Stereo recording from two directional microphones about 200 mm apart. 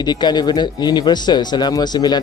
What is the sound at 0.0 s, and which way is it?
A man's voice, 20° left (ahead or behind).